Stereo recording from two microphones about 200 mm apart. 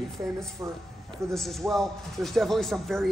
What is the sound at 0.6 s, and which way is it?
Speech, 15° right (ahead or behind).